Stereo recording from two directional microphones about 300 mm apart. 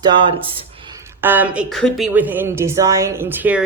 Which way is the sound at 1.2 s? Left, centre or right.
Centre.